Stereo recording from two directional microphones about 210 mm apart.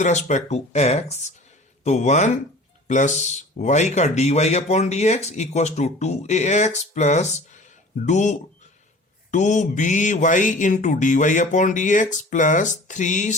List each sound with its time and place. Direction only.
0.0 s speech: 35° left (ahead or behind)